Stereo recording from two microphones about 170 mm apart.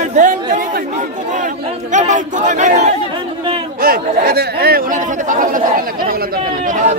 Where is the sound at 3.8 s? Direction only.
60° right (ahead or behind).